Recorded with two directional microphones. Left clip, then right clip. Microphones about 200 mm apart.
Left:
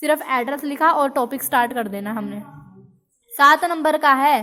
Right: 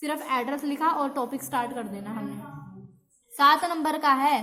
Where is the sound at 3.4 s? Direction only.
35° left (ahead or behind).